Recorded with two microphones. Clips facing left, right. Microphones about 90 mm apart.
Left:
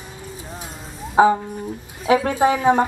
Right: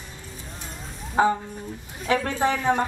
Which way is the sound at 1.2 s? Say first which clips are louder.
Left 6 dB; 10° left (ahead or behind).